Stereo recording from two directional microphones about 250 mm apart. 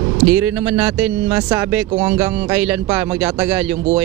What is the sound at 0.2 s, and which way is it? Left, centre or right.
Speech, centre.